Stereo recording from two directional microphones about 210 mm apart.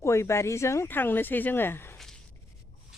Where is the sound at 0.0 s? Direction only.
15° left (ahead or behind).